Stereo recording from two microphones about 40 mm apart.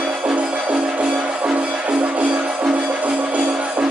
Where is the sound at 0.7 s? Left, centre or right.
Right.